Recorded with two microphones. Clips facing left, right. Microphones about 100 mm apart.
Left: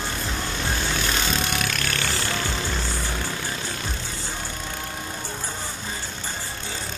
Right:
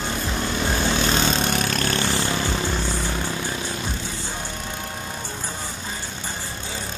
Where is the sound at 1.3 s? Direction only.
35° right (ahead or behind).